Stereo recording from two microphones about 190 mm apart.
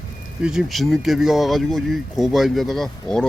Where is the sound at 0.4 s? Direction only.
Centre (ahead or behind).